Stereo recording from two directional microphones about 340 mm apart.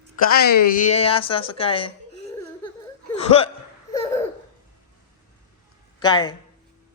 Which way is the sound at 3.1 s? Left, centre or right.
Centre.